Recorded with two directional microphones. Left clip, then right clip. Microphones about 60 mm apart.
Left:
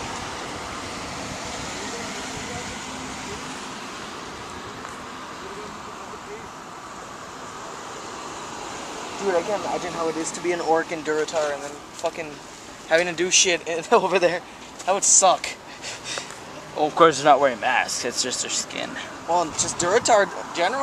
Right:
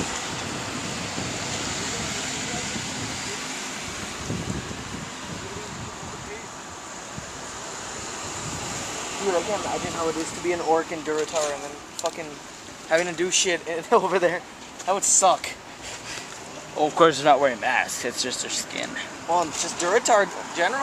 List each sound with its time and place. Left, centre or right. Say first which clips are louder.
0.9 s vehicle: right 1 dB; left
8.6 s a sound: right 1 dB; centre
9.3 s speech: left 2 dB; centre
10.4 s speech: left 1 dB; left
12.9 s speech: left 3 dB; left
14.9 s speech: left 2 dB; left
16.7 s speech: even; centre
17.1 s speech: left 2 dB; left
17.4 s speech: left 1 dB; centre
19.3 s speech: left 1 dB; left